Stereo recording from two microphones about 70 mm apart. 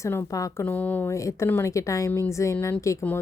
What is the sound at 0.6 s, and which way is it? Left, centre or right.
Speech, left.